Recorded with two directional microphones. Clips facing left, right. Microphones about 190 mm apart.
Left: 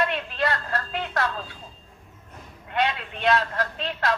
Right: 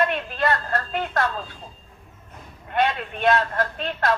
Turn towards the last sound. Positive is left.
turn(degrees=-50)  # may be behind; listen again after turning